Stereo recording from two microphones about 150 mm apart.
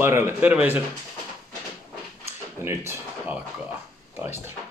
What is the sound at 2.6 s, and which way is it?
Speech, 15° right (ahead or behind).